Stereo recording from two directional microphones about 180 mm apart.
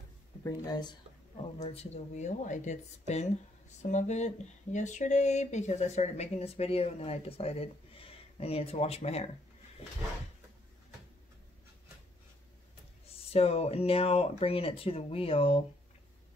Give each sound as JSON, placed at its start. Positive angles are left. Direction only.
{"t": 0.4, "sound": "speech", "side_deg": 20}
{"t": 1.6, "sound": "speech", "side_deg": 35}
{"t": 13.0, "sound": "speech", "side_deg": 35}